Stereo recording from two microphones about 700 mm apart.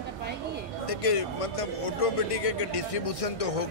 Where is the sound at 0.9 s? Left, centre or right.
Left.